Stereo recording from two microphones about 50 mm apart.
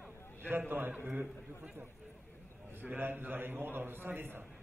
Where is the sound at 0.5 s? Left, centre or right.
Right.